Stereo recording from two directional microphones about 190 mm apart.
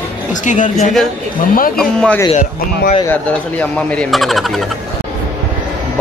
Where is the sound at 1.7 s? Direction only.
5° left (ahead or behind).